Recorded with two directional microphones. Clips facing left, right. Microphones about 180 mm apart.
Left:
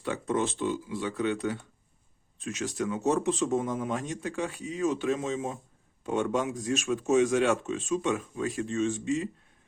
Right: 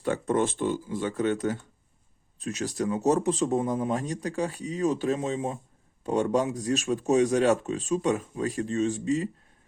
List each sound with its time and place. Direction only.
0.0 s speech: 50° right (ahead or behind)